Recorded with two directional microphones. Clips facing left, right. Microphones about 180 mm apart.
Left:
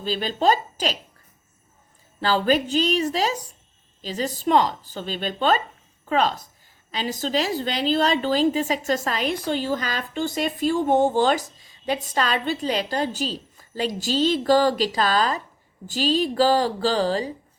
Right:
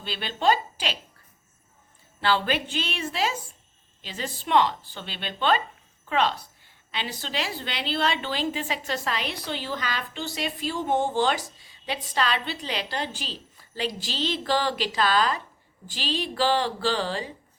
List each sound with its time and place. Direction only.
0.0 s a woman's voice: 40° left (ahead or behind)
2.2 s a woman's voice: 40° left (ahead or behind)